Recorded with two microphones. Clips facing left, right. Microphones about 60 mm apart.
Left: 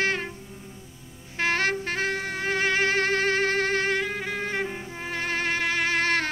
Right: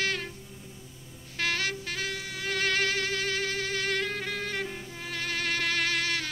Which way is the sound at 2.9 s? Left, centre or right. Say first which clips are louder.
Left 7 dB; left.